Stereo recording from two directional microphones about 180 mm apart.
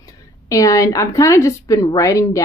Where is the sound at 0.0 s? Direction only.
20° left (ahead or behind).